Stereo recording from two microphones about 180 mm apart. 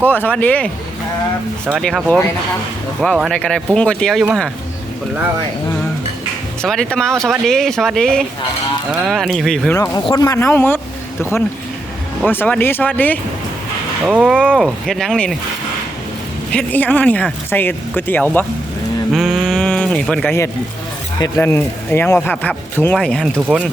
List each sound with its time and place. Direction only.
0.0 s speech: 10° left (ahead or behind)
1.8 s speech: centre (ahead or behind)
6.6 s speech: 5° left (ahead or behind)
9.7 s speech: 20° left (ahead or behind)
12.3 s speech: 10° left (ahead or behind)
14.1 s speech: 5° right (ahead or behind)
16.5 s speech: 10° left (ahead or behind)
19.1 s speech: 5° right (ahead or behind)